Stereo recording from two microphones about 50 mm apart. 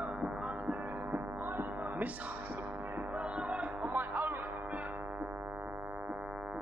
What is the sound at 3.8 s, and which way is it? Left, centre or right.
Music, right.